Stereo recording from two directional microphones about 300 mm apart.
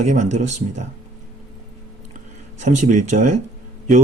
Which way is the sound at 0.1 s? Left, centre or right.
Right.